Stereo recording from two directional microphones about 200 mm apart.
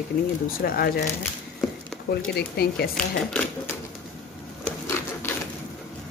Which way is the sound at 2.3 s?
55° left (ahead or behind).